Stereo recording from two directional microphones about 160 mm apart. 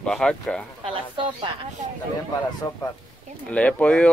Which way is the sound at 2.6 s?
20° left (ahead or behind).